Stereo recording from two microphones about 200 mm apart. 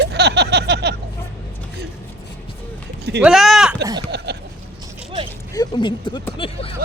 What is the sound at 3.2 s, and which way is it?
Speech, centre (ahead or behind).